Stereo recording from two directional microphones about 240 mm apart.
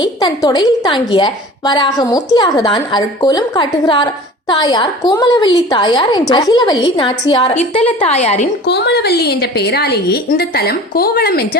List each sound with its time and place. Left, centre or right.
0.0 s a woman's voice: centre
8.6 s a woman's voice: left